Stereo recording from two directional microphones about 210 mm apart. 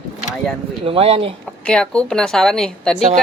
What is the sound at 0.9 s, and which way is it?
Speech, 30° right (ahead or behind).